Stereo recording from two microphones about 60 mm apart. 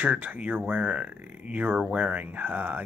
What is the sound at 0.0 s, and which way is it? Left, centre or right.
Speech, right.